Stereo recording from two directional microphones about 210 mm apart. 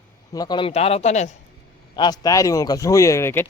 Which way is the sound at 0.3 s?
20° left (ahead or behind).